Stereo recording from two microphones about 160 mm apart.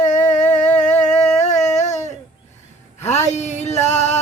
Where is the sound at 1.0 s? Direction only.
45° left (ahead or behind).